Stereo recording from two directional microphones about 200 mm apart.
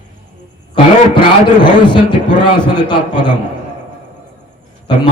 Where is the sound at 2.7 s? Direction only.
20° left (ahead or behind).